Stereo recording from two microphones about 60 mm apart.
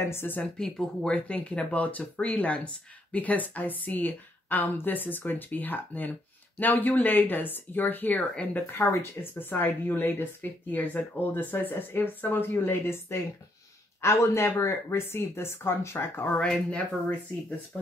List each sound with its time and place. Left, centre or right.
0.0 s speech: left
0.6 s speech: centre
1.1 s speech: centre; by 13.2 s left
14.0 s speech: left
16.3 s speech: centre